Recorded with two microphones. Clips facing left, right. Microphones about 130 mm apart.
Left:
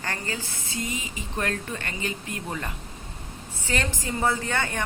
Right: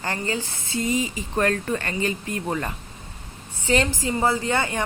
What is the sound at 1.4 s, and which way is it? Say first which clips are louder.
Speech: right 7 dB; 45° right (ahead or behind).